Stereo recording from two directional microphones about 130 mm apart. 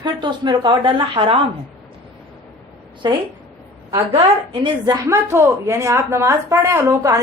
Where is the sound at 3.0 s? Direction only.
35° right (ahead or behind).